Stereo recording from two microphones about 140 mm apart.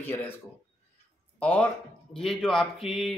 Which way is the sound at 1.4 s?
10° left (ahead or behind).